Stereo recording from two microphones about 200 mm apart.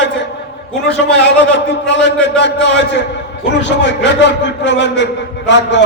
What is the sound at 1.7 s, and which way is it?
Speech, 65° left (ahead or behind).